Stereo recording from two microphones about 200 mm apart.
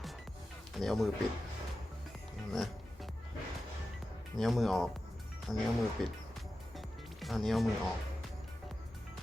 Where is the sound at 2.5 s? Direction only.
Centre (ahead or behind).